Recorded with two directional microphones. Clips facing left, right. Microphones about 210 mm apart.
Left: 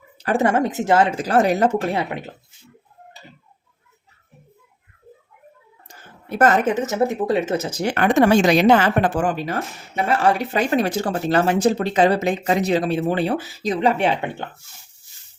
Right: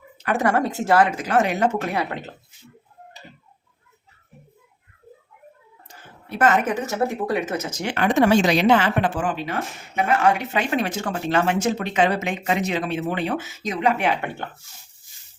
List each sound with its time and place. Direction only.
0.2 s speech: 30° left (ahead or behind)
2.0 s speech: 15° left (ahead or behind)
6.2 s a woman's voice: 45° left (ahead or behind)
6.7 s speech: 20° left (ahead or behind)
7.9 s speech: 50° left (ahead or behind); by 14.2 s 30° left (ahead or behind)
14.2 s speech: 15° left (ahead or behind)